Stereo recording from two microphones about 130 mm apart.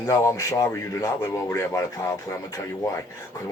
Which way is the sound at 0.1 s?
25° left (ahead or behind).